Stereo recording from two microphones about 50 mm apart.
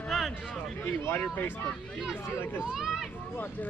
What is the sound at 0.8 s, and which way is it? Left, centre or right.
Speech, left.